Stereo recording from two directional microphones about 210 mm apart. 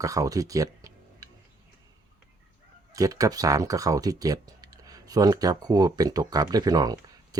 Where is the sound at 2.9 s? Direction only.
15° right (ahead or behind).